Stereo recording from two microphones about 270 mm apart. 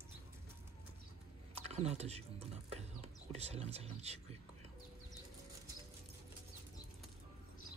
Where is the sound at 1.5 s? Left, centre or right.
Right.